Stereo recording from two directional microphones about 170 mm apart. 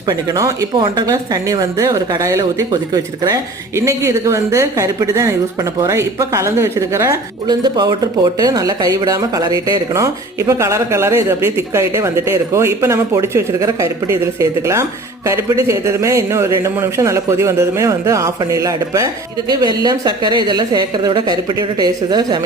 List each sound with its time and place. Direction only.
0.1 s a man's voice: 20° right (ahead or behind)